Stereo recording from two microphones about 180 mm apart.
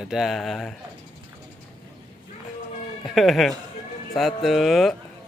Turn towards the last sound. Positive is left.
turn(degrees=0)  # may be behind; listen again after turning